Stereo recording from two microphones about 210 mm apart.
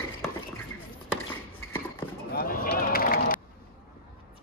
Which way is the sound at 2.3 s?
45° left (ahead or behind).